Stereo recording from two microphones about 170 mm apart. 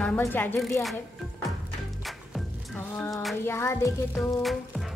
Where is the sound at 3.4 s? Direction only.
15° left (ahead or behind).